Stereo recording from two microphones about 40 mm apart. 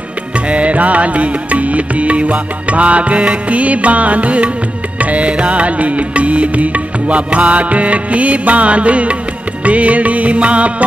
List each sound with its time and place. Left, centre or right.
0.5 s music: right